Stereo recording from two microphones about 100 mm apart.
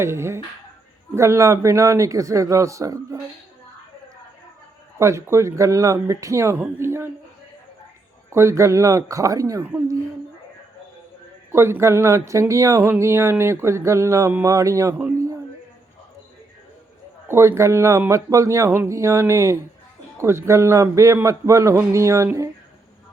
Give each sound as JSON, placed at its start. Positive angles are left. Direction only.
{"t": 0.0, "sound": "a man's voice", "side_deg": -25}
{"t": 4.9, "sound": "a man's voice", "side_deg": -30}
{"t": 8.3, "sound": "speech", "side_deg": -30}
{"t": 11.5, "sound": "a man's voice", "side_deg": -25}
{"t": 17.2, "sound": "a man's voice", "side_deg": -25}